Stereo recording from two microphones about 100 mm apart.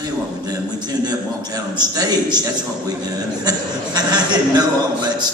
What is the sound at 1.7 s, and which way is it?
Speech, 45° right (ahead or behind).